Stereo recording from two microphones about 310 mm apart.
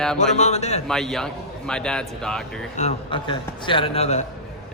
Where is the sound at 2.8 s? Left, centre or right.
Centre.